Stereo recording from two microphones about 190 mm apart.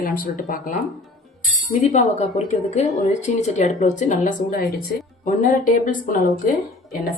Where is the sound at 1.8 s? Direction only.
35° left (ahead or behind).